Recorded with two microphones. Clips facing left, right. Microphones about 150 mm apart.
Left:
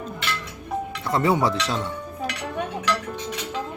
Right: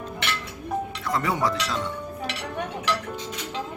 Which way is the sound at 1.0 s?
25° left (ahead or behind).